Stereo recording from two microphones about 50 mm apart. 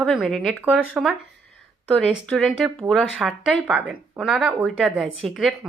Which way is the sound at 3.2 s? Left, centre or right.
Right.